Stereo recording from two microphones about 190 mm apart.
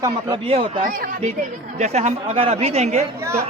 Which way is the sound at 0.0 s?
25° right (ahead or behind).